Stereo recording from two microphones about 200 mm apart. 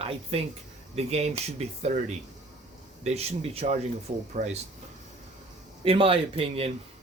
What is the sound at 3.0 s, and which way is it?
Speech, 30° right (ahead or behind).